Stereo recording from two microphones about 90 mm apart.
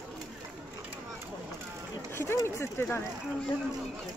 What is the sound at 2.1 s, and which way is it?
Speech, 30° left (ahead or behind).